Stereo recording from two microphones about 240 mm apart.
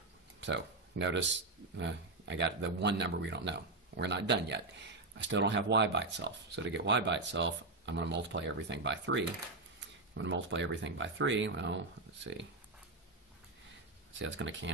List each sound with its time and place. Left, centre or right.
0.4 s a sound: right
1.8 s speech: right
14.1 s speech: right